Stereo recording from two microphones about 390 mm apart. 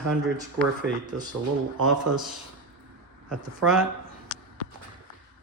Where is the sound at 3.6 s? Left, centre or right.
Right.